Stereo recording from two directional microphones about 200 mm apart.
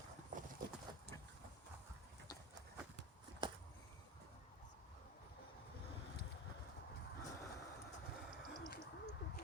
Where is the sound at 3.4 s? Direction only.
25° right (ahead or behind).